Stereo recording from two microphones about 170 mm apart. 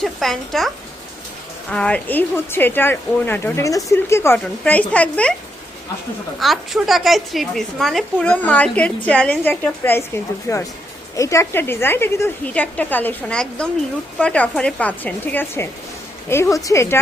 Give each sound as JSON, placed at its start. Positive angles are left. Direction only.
{"t": 0.0, "sound": "a woman's voice", "side_deg": 0}
{"t": 1.7, "sound": "a woman's voice", "side_deg": 5}
{"t": 6.4, "sound": "a woman's voice", "side_deg": 0}